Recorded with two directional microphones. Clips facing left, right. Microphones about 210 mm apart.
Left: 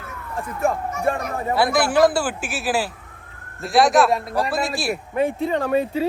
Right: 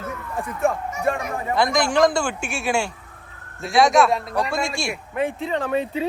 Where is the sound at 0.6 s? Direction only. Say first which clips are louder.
Left 1 dB; centre (ahead or behind).